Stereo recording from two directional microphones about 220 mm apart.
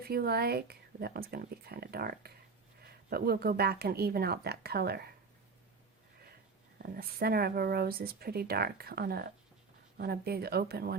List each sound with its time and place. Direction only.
0.0 s speech: 45° right (ahead or behind)
6.8 s speech: 45° right (ahead or behind)